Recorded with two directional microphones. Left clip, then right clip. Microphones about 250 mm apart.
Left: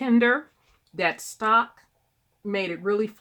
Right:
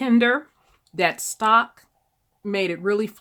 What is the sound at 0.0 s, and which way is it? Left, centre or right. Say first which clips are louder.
Speech: right 2 dB; right.